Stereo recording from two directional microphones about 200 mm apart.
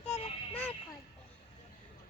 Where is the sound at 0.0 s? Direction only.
30° left (ahead or behind).